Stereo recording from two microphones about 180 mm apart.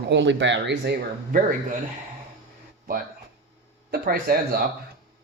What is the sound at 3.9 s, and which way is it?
Speech, 55° right (ahead or behind).